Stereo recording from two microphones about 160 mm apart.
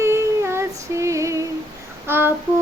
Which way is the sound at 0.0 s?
15° right (ahead or behind).